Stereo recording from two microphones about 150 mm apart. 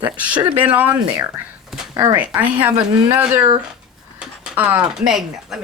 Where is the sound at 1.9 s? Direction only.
25° right (ahead or behind).